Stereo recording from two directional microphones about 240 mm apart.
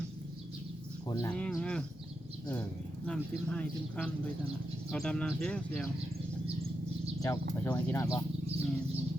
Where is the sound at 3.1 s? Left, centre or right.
Centre.